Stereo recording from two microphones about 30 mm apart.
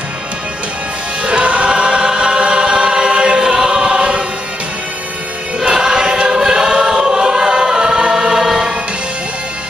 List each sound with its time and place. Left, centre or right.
1.2 s choir: right
5.7 s choir: right